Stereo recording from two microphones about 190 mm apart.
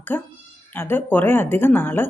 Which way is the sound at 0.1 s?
10° left (ahead or behind).